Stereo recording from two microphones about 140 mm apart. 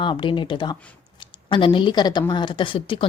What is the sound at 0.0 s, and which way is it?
A woman's voice, 35° left (ahead or behind).